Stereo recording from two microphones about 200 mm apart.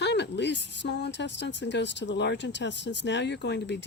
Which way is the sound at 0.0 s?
60° left (ahead or behind).